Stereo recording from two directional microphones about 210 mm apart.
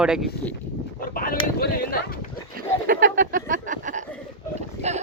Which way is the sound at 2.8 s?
40° right (ahead or behind).